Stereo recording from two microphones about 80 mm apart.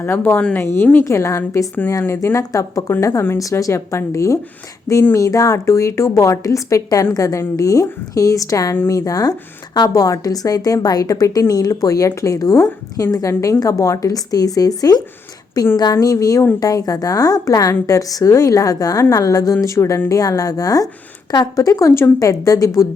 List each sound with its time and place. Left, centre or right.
0.0 s a woman's voice: left